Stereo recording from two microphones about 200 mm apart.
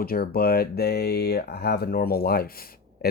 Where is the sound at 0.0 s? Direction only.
50° left (ahead or behind).